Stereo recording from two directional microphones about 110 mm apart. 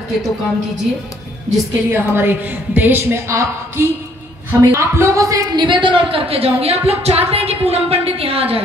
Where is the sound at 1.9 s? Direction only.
20° right (ahead or behind).